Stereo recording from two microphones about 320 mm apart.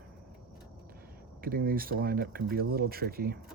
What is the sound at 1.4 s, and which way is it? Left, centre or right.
Speech, right.